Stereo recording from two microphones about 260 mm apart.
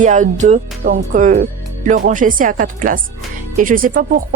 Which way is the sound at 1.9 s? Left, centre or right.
Right.